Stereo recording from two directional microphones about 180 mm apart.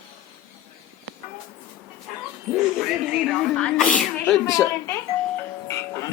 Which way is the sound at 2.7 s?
Centre (ahead or behind).